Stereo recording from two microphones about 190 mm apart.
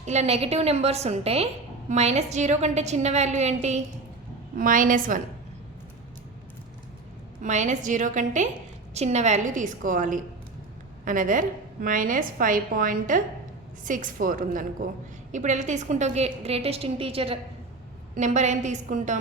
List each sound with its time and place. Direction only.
0.0 s a woman's voice: 35° right (ahead or behind)
7.4 s a woman's voice: 40° right (ahead or behind)